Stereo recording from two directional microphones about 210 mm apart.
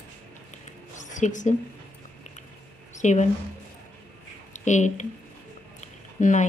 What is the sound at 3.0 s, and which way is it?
Speech, 35° left (ahead or behind).